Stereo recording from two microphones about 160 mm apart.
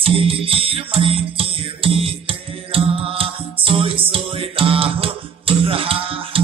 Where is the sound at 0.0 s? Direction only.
35° right (ahead or behind).